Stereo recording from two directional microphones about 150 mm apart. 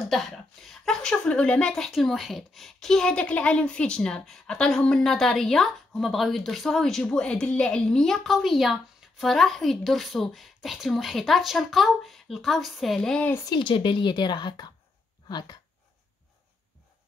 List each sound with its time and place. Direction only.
0.1 s a woman's voice: centre (ahead or behind)
13.5 s a woman's voice: 35° left (ahead or behind)